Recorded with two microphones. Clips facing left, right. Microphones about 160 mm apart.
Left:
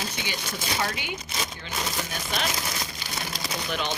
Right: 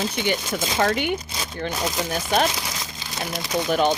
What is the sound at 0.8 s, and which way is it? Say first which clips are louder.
Speech: right 10 dB; 60° right (ahead or behind).